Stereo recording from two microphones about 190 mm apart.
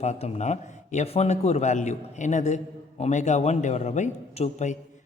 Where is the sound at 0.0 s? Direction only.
35° left (ahead or behind).